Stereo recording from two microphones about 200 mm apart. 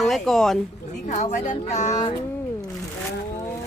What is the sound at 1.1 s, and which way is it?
Speech, 35° left (ahead or behind).